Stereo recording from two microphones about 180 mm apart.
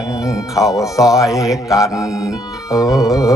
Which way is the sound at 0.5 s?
20° left (ahead or behind).